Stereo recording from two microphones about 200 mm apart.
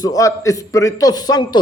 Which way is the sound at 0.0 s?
15° left (ahead or behind).